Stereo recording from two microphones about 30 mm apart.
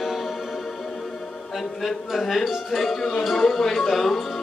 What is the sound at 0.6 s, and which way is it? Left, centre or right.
Music, centre.